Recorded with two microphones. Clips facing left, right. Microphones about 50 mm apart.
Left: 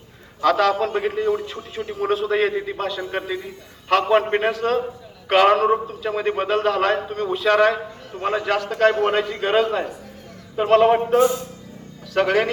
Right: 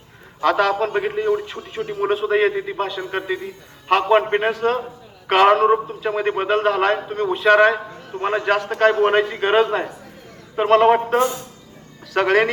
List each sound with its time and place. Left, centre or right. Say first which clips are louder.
0.4 s a man's voice: even; centre
5.3 s a man's voice: right 2 dB; right
10.6 s a man's voice: right 1 dB; right